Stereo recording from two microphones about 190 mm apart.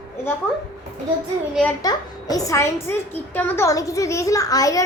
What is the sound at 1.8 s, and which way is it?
A woman's voice, 20° left (ahead or behind).